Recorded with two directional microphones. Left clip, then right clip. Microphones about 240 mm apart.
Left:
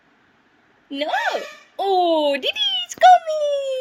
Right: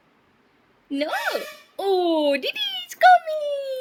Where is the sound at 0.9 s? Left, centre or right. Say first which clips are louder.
Left 3 dB; right.